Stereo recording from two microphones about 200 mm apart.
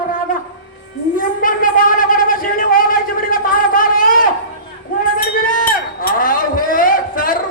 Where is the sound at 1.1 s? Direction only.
45° left (ahead or behind).